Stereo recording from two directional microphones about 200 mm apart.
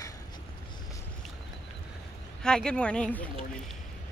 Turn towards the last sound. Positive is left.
turn(degrees=5)  # may be behind; listen again after turning